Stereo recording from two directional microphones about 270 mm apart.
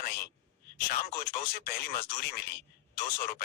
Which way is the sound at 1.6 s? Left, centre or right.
Left.